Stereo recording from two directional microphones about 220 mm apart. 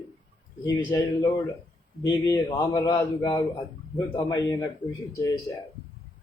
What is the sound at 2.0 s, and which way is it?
Speech, 15° left (ahead or behind).